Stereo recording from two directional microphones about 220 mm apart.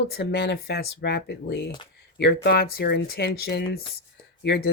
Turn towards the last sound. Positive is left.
turn(degrees=50)  # may be behind; listen again after turning